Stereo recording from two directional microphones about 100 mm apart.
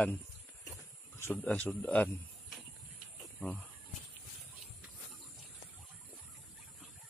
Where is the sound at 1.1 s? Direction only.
25° left (ahead or behind).